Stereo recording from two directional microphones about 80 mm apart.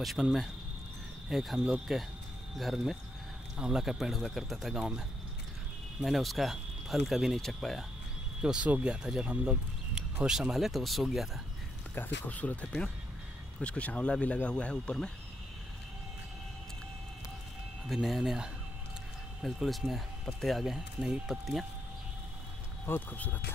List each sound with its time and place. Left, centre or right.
0.0 s speech: centre
5.9 s speech: centre
8.4 s speech: centre
11.9 s speech: left
17.8 s speech: centre
22.8 s speech: left